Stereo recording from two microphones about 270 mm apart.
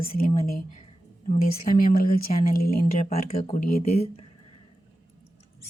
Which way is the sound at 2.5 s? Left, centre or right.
Left.